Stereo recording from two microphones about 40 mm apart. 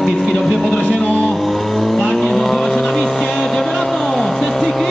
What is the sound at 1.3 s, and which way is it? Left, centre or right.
Vehicle, centre.